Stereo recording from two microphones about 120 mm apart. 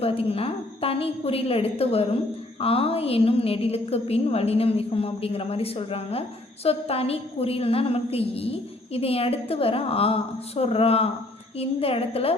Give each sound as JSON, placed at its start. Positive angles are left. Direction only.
{"t": 0.0, "sound": "a woman's voice", "side_deg": 55}